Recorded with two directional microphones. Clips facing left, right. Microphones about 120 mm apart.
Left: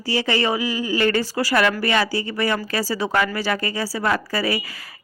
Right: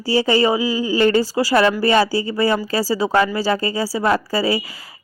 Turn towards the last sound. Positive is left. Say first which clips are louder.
# right 4 dB
turn(degrees=-30)  # may be behind; listen again after turning